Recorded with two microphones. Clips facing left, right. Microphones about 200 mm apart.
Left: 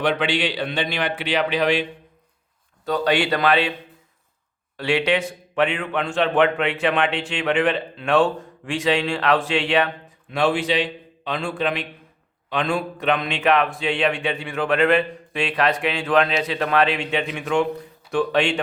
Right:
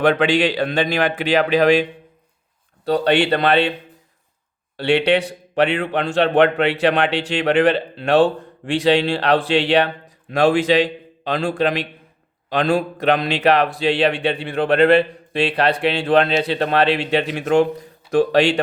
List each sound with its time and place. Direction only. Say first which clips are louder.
0.0 s a man's voice: right 6 dB; 45° right (ahead or behind)
2.8 s a man's voice: right 4 dB; 30° right (ahead or behind)
4.8 s a man's voice: right 4 dB; 30° right (ahead or behind)